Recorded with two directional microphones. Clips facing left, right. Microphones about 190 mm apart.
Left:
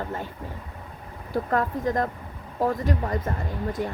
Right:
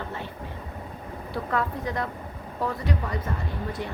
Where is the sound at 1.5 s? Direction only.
45° left (ahead or behind).